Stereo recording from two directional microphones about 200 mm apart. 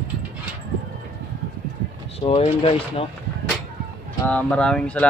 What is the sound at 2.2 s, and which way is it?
Speech, 30° left (ahead or behind).